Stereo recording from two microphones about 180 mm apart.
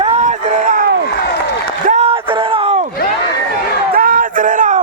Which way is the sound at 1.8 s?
35° right (ahead or behind).